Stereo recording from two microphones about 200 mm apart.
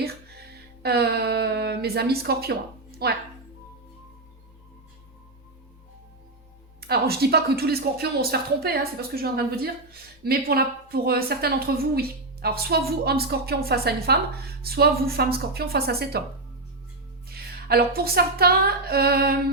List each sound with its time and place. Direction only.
0.0 s music: 55° right (ahead or behind)
3.0 s speech: 55° right (ahead or behind)
6.8 s speech: 50° right (ahead or behind)
17.2 s a woman's voice: 50° right (ahead or behind)